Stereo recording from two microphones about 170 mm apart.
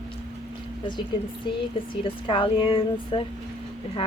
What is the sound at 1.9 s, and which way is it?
Speech, 30° left (ahead or behind).